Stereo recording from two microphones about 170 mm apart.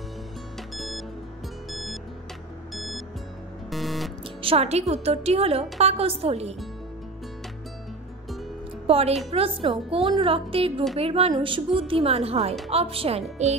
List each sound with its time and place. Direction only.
0.7 s music: centre (ahead or behind)
4.4 s a woman's voice: 35° right (ahead or behind)
8.8 s a woman's voice: 35° right (ahead or behind)